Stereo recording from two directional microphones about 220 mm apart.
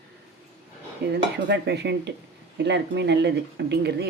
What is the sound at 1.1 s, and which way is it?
Speech, 50° right (ahead or behind).